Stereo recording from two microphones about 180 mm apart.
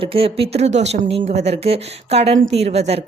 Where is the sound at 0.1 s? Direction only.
30° right (ahead or behind).